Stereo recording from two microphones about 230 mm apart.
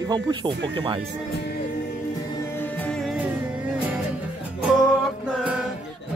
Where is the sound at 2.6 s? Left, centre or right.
Centre.